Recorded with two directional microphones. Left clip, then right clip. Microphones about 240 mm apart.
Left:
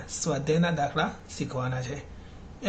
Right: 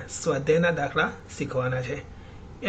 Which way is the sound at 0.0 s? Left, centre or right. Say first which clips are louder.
Right 4 dB; centre.